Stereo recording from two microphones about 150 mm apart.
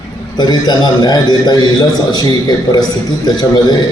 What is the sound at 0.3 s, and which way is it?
A man's voice, 30° left (ahead or behind).